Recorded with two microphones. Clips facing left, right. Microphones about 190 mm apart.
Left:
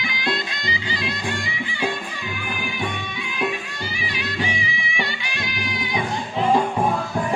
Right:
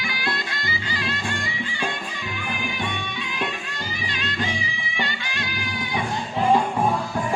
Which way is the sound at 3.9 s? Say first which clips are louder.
Left 2 dB; 10° left (ahead or behind).